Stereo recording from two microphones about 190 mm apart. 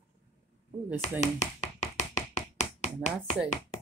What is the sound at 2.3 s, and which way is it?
Tap, 35° left (ahead or behind).